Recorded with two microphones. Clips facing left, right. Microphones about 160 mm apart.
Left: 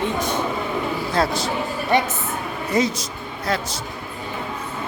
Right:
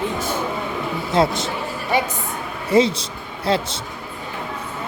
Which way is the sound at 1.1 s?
20° right (ahead or behind).